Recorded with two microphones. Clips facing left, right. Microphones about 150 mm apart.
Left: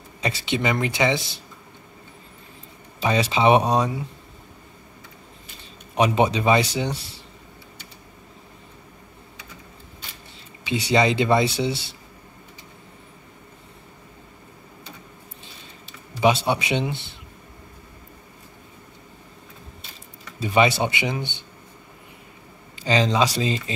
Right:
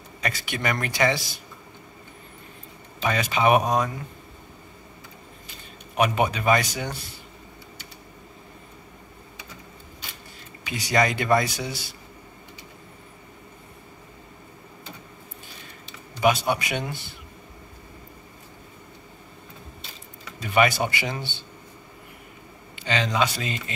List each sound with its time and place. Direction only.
0.2 s speech: 25° left (ahead or behind)
3.0 s speech: 30° left (ahead or behind)
5.9 s speech: 25° left (ahead or behind)
10.7 s speech: 25° left (ahead or behind)
16.2 s speech: 25° left (ahead or behind)
20.4 s speech: 25° left (ahead or behind)
22.8 s speech: 30° left (ahead or behind)